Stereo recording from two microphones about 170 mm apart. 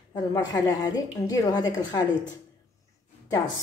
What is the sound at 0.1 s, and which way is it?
A woman's voice, 20° left (ahead or behind).